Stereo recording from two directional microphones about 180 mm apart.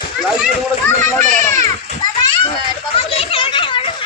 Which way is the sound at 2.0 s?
25° left (ahead or behind).